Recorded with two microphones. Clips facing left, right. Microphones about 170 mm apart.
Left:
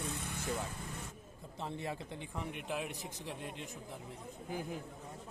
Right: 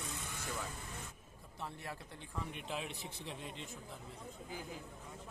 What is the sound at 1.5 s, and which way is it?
Speech, 20° left (ahead or behind).